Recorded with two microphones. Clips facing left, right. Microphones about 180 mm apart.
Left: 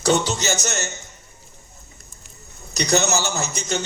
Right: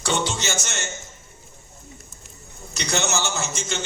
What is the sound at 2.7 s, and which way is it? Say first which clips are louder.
A man's voice: left 5 dB; 40° left (ahead or behind).